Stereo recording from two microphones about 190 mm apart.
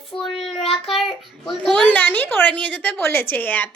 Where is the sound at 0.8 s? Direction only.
Centre (ahead or behind).